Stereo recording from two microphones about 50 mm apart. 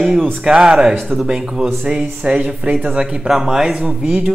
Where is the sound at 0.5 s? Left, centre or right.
Centre.